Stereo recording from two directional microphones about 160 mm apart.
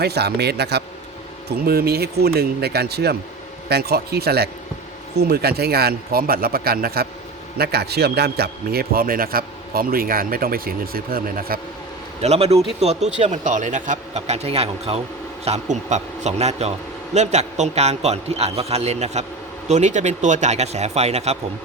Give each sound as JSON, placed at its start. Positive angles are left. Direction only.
{"t": 0.0, "sound": "speech", "side_deg": -90}
{"t": 1.5, "sound": "a man's voice", "side_deg": -75}
{"t": 7.6, "sound": "a man's voice", "side_deg": -90}
{"t": 12.2, "sound": "a man's voice", "side_deg": -40}